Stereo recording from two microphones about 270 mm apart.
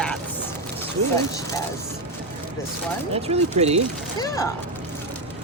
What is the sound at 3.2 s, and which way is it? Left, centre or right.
Speech, right.